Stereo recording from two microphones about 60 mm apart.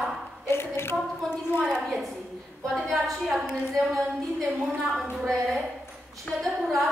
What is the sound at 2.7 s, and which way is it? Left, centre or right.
A woman's voice, centre.